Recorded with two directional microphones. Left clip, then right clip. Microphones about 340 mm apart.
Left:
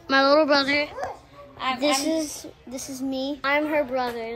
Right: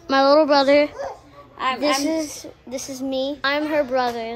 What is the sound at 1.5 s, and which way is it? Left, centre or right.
Music, right.